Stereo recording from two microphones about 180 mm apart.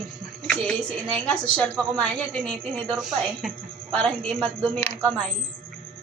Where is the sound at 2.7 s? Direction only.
30° right (ahead or behind).